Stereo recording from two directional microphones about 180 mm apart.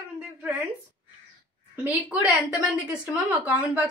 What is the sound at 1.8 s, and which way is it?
A woman's voice, 10° right (ahead or behind).